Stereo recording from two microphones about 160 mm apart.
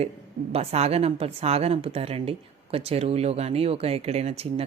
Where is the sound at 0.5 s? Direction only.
40° right (ahead or behind).